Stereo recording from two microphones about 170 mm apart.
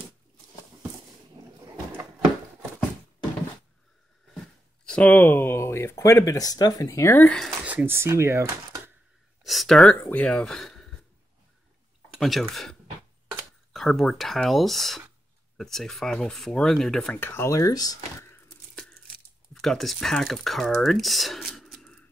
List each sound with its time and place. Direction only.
4.8 s speech: 5° left (ahead or behind)
7.6 s speech: 10° right (ahead or behind)
9.4 s speech: centre (ahead or behind)
12.2 s speech: centre (ahead or behind)
13.7 s speech: centre (ahead or behind); by 18.3 s 20° left (ahead or behind)
19.5 s speech: centre (ahead or behind)